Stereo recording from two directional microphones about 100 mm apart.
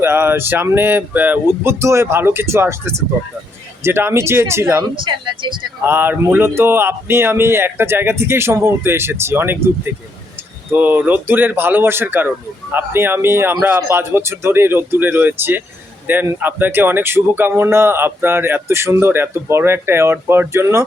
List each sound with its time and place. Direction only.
0.0 s speech: 25° right (ahead or behind)
4.8 s speech: 50° right (ahead or behind)
5.8 s speech: 20° right (ahead or behind)
10.7 s speech: 20° right (ahead or behind)